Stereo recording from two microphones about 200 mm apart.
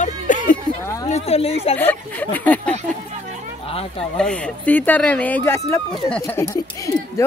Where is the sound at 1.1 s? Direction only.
30° left (ahead or behind).